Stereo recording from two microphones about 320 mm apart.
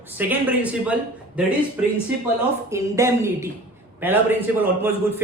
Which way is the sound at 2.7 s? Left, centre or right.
Centre.